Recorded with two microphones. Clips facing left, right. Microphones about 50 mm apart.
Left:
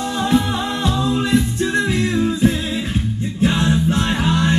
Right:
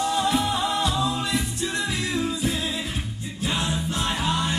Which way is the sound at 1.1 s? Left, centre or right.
Left.